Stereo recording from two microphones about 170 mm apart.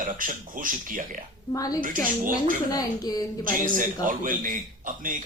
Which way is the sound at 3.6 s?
55° right (ahead or behind).